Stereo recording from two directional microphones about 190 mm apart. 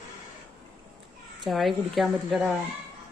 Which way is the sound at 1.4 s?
Centre (ahead or behind).